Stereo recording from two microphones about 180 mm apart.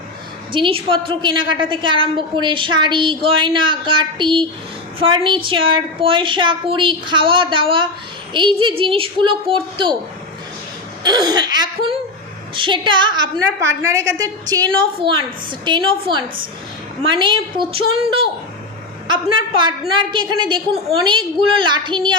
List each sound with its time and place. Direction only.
0.5 s a woman's voice: 30° right (ahead or behind)
11.0 s a woman's voice: 25° right (ahead or behind)
20.1 s a woman's voice: 25° right (ahead or behind)